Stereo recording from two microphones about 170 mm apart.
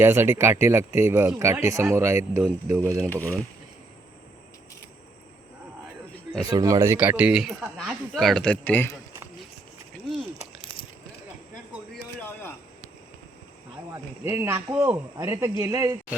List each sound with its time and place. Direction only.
0.0 s speech: 15° right (ahead or behind)
6.4 s speech: 20° right (ahead or behind); by 9.0 s 10° left (ahead or behind)
13.9 s speech: 15° right (ahead or behind)